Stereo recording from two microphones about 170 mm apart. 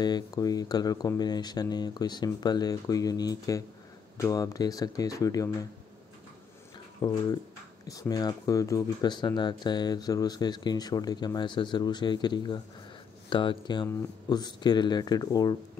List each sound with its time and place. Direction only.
0.0 s speech: 20° left (ahead or behind)
7.0 s speech: 25° left (ahead or behind)